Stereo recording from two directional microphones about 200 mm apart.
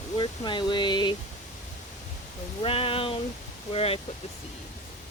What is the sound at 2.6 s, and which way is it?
Speech, 25° left (ahead or behind).